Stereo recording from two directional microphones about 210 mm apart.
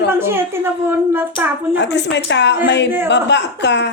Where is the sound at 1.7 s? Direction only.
55° left (ahead or behind).